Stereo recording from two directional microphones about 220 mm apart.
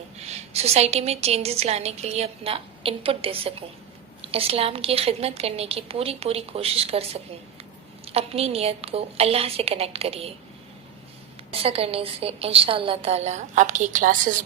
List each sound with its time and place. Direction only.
0.3 s a woman's voice: 30° right (ahead or behind)
11.6 s a woman's voice: 25° right (ahead or behind)